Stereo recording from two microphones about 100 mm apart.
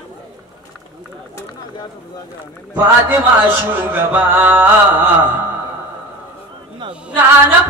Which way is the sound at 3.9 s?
20° right (ahead or behind).